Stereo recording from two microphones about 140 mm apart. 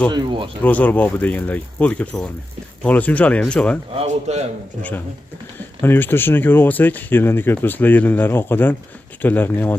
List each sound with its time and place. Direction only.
0.1 s speech: 35° right (ahead or behind)
0.7 s speech: 10° left (ahead or behind)
3.9 s speech: 50° right (ahead or behind)
5.8 s speech: 15° left (ahead or behind)